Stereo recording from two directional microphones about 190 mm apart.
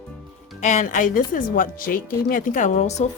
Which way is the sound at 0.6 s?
40° left (ahead or behind).